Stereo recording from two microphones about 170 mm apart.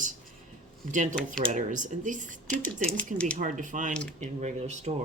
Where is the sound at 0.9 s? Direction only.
45° right (ahead or behind).